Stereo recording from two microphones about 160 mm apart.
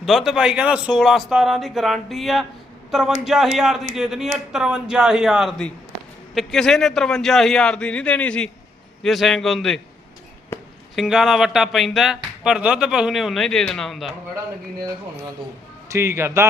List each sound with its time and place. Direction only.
0.0 s speech: centre (ahead or behind)
10.5 s a sound: 15° left (ahead or behind)
10.9 s speech: centre (ahead or behind)
15.9 s speech: 15° right (ahead or behind)